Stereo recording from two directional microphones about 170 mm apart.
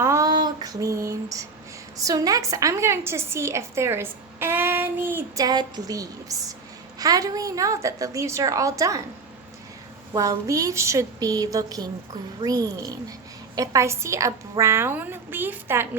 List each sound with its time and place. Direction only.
0.0 s female singing: 20° right (ahead or behind)
2.0 s a woman's voice: 20° right (ahead or behind)
10.1 s a woman's voice: 20° right (ahead or behind)